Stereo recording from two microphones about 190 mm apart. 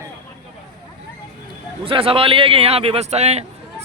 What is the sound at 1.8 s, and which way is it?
Speech, 30° right (ahead or behind).